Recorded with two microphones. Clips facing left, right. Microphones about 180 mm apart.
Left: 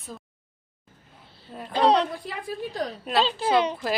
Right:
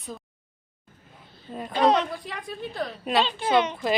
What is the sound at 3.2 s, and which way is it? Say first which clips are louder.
Speech: even; 30° left (ahead or behind).